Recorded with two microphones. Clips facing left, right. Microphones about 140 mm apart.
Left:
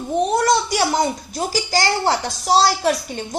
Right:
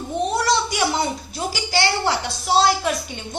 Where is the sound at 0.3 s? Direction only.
50° left (ahead or behind).